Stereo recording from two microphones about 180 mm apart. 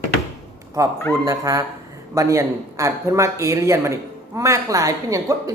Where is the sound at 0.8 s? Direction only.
15° right (ahead or behind).